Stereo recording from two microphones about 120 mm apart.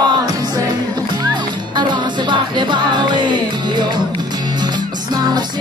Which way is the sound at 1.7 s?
40° right (ahead or behind).